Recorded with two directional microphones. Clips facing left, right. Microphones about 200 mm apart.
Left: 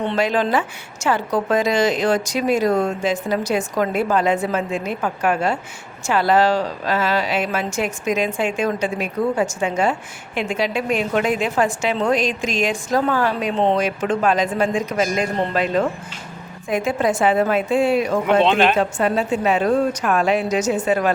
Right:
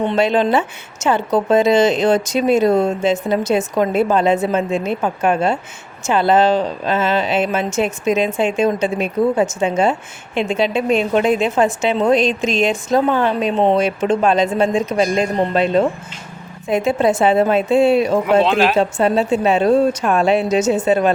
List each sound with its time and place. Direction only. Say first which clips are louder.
0.2 s speech: right 4 dB; 25° right (ahead or behind)
18.4 s speech: right 1 dB; 5° right (ahead or behind)
18.8 s speech: right 4 dB; 25° right (ahead or behind)